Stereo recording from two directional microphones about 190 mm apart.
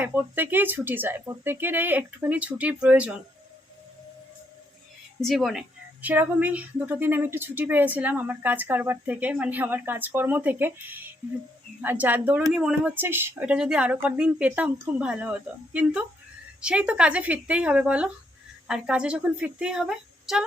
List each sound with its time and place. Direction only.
0.0 s a woman's voice: 10° right (ahead or behind)
5.2 s a woman's voice: centre (ahead or behind)